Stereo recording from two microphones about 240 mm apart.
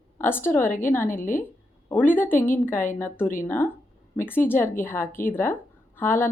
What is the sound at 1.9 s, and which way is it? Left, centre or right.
A woman's voice, centre.